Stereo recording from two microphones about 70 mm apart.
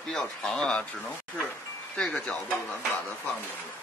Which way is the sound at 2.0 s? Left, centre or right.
Centre.